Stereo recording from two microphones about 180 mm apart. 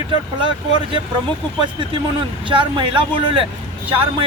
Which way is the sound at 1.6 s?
25° right (ahead or behind).